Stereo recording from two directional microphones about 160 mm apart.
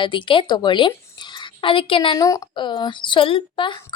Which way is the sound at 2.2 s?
20° left (ahead or behind).